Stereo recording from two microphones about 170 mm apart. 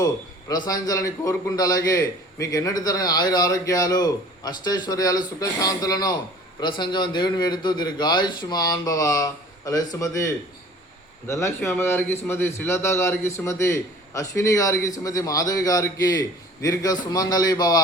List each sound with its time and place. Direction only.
0.0 s a man's voice: 25° left (ahead or behind)
11.3 s a man's voice: 15° left (ahead or behind)